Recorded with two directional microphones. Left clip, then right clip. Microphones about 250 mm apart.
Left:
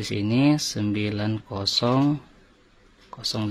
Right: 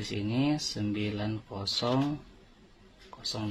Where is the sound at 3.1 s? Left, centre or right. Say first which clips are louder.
Left 8 dB; left.